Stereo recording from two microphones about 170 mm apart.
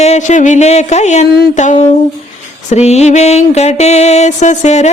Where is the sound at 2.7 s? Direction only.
40° left (ahead or behind).